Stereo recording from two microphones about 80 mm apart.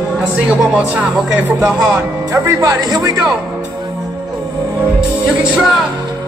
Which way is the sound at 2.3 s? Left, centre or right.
Right.